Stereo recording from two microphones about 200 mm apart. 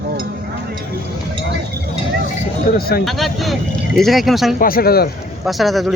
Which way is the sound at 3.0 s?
Centre (ahead or behind).